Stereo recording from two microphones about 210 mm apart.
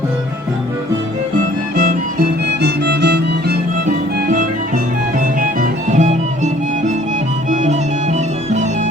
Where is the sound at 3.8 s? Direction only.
40° right (ahead or behind).